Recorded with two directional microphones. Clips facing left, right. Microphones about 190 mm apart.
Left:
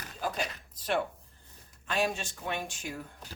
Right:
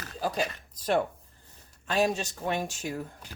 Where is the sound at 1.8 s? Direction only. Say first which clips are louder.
Right 4 dB; 40° right (ahead or behind).